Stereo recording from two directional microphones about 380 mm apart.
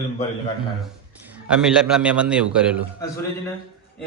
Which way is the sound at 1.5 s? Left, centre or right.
Centre.